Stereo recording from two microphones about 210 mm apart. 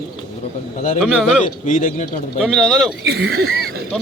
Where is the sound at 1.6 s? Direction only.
35° left (ahead or behind).